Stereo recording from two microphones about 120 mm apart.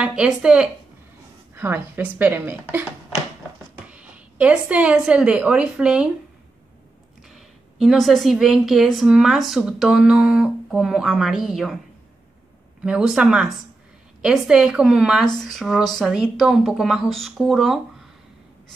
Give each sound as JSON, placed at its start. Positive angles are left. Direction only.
{"t": 0.0, "sound": "speech", "side_deg": -5}
{"t": 1.5, "sound": "speech", "side_deg": -20}
{"t": 3.9, "sound": "a woman's voice", "side_deg": -10}
{"t": 7.3, "sound": "a woman's voice", "side_deg": 0}
{"t": 12.8, "sound": "a woman's voice", "side_deg": -5}